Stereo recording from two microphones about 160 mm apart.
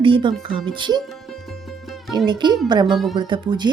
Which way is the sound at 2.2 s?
30° right (ahead or behind).